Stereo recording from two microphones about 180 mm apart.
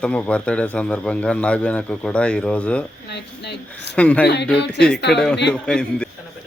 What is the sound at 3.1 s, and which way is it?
Speech, 70° left (ahead or behind).